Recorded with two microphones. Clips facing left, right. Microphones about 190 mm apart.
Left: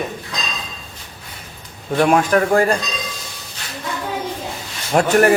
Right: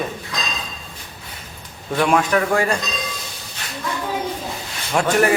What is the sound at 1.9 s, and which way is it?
Speech, 45° left (ahead or behind).